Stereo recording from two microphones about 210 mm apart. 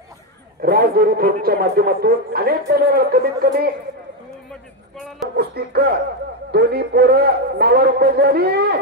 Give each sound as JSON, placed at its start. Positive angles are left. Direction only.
{"t": 0.6, "sound": "a man's voice", "side_deg": -45}
{"t": 4.5, "sound": "a sound", "side_deg": 5}
{"t": 5.3, "sound": "a man's voice", "side_deg": -50}